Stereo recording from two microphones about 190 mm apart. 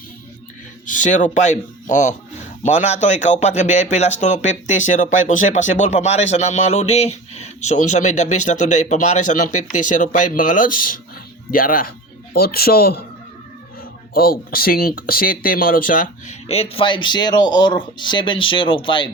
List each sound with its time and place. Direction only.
0.9 s speech: 40° left (ahead or behind)
14.1 s speech: 50° left (ahead or behind); by 19.1 s 25° left (ahead or behind)